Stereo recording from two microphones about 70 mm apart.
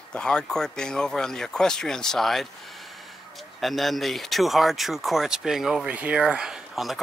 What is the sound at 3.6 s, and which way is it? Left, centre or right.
Speech, centre.